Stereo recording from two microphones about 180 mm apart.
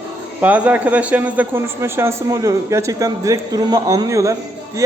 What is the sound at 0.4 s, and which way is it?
A man's voice, 10° right (ahead or behind).